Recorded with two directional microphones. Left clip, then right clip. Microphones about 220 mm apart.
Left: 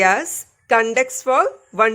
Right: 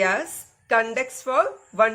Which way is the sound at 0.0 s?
45° left (ahead or behind).